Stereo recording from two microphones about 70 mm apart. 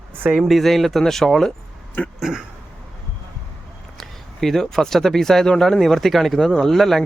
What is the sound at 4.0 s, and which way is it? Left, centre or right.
Speech, centre.